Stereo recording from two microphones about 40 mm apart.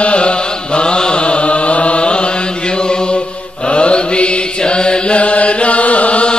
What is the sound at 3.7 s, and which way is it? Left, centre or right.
Mantra, left.